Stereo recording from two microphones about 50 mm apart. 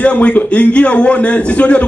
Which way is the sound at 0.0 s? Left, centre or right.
Left.